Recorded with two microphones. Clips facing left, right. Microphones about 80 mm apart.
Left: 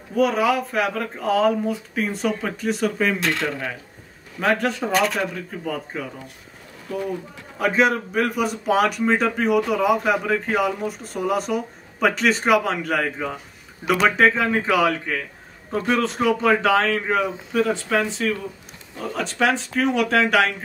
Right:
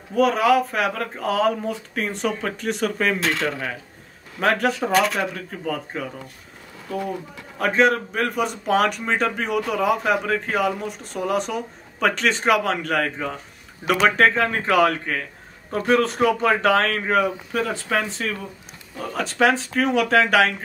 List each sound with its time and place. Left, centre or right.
0.1 s speech: centre
7.6 s speech: centre